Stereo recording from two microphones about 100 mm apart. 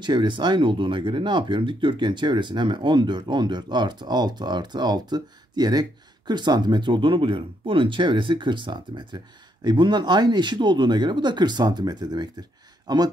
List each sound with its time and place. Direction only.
0.0 s speech: 50° right (ahead or behind)